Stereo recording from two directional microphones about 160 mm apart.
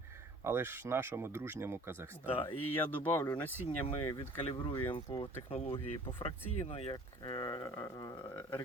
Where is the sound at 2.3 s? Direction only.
35° left (ahead or behind).